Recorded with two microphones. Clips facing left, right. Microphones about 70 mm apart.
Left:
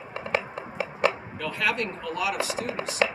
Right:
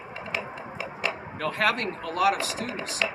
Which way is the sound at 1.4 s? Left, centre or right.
Right.